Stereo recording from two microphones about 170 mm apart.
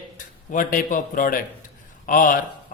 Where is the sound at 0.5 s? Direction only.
50° left (ahead or behind).